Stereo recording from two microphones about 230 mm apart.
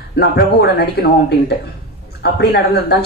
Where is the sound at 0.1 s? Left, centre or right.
Left.